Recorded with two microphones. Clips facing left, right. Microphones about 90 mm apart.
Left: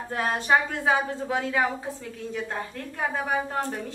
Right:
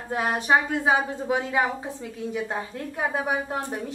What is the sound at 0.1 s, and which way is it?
A woman's voice, 15° right (ahead or behind).